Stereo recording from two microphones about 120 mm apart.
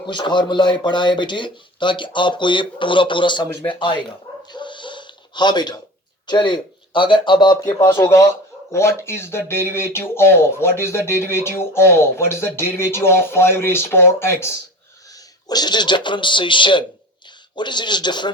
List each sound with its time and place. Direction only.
0.1 s speech: 40° left (ahead or behind)
4.5 s a sound: 40° left (ahead or behind)
6.2 s speech: 40° left (ahead or behind); by 14.5 s 20° left (ahead or behind)
15.1 s speech: 35° left (ahead or behind)